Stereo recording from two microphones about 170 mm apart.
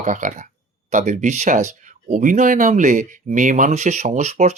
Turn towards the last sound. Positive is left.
turn(degrees=-40)  # may be behind; listen again after turning